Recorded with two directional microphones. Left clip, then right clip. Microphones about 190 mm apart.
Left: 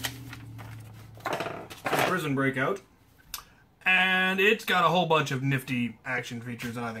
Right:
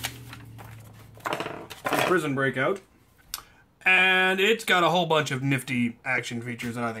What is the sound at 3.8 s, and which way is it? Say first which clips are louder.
Speech: right 3 dB; 45° right (ahead or behind).